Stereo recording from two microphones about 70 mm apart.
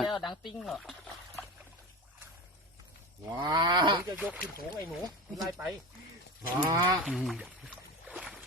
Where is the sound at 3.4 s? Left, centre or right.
Right.